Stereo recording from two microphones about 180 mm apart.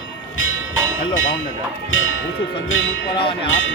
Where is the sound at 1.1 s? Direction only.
90° left.